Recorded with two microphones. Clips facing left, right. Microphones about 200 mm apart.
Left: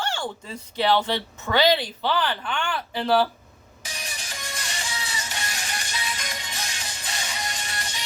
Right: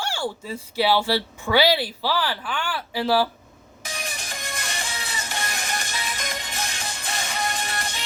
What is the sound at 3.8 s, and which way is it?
Music, 55° right (ahead or behind).